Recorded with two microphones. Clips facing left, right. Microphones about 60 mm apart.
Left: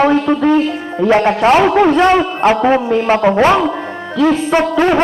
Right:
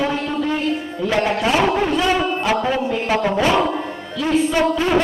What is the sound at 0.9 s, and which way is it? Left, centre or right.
A man's voice, left.